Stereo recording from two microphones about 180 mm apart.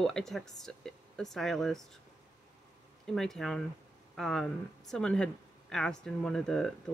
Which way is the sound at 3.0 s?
Centre (ahead or behind).